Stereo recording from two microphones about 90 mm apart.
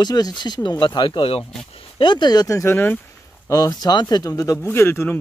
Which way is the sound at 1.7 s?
65° left (ahead or behind).